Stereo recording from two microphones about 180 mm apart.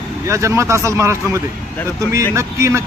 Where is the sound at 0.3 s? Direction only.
15° right (ahead or behind).